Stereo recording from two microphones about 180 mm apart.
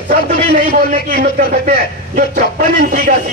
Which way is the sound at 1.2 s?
55° right (ahead or behind).